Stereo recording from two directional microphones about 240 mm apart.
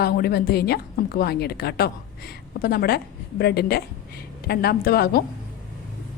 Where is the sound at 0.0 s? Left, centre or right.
Left.